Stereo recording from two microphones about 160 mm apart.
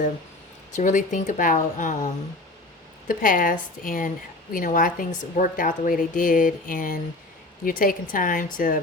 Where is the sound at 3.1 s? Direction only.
60° left (ahead or behind).